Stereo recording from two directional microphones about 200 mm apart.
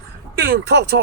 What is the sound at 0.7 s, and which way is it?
Speech, 60° right (ahead or behind).